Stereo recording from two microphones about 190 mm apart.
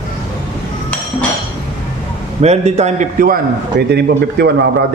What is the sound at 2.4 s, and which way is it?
A man's voice, 35° right (ahead or behind).